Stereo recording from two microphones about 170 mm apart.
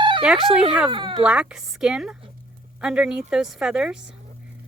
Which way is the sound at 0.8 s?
30° right (ahead or behind).